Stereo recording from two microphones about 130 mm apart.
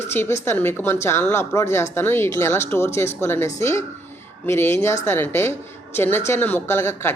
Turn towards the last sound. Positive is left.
turn(degrees=20)  # may be behind; listen again after turning